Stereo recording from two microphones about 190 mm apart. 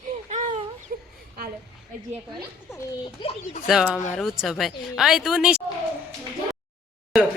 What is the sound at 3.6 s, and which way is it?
Speech, centre (ahead or behind).